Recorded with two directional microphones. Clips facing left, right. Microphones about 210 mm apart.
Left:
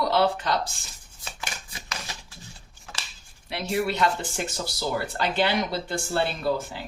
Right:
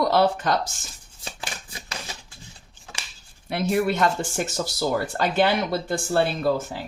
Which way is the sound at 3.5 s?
50° right (ahead or behind).